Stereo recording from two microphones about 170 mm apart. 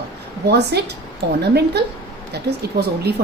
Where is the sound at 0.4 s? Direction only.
75° right (ahead or behind).